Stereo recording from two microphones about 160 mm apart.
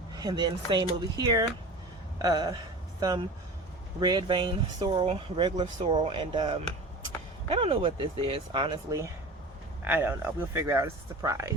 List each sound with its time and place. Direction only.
0.1 s speech: 25° right (ahead or behind)
9.8 s speech: 15° right (ahead or behind)